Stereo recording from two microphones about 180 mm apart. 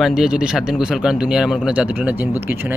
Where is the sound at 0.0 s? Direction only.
5° right (ahead or behind).